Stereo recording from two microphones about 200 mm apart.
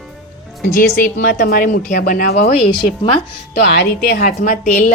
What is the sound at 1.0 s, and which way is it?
A woman's voice, 45° left (ahead or behind).